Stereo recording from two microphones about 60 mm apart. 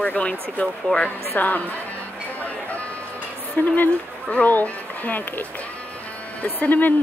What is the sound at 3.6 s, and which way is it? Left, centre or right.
Speech, left.